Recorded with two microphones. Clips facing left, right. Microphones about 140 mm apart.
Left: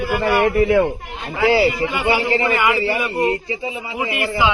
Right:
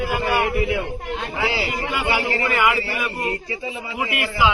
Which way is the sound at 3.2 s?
20° left (ahead or behind).